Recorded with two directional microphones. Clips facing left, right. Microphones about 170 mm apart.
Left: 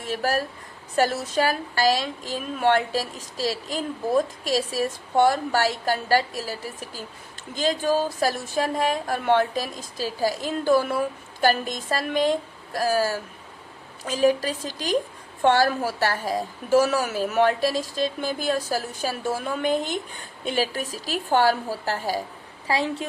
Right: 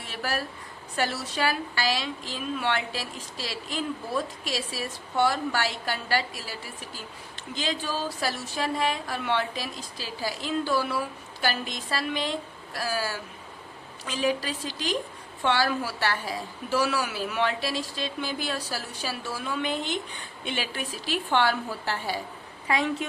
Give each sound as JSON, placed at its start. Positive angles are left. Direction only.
{"t": 0.0, "sound": "a woman's voice", "side_deg": 45}